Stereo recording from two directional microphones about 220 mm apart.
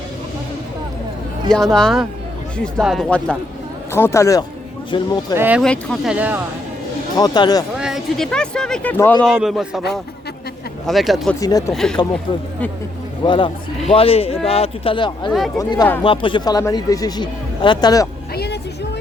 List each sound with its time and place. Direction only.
1.5 s speech: centre (ahead or behind); by 5.1 s 20° left (ahead or behind)
5.4 s speech: 5° right (ahead or behind)
7.2 s speech: 20° left (ahead or behind)
7.8 s speech: centre (ahead or behind)
10.8 s speech: centre (ahead or behind)
11.3 s speech: 15° left (ahead or behind)
11.7 s speech: centre (ahead or behind)
13.2 s speech: 20° left (ahead or behind)
18.3 s music: 50° left (ahead or behind)